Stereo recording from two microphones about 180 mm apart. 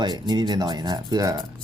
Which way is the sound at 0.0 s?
25° right (ahead or behind).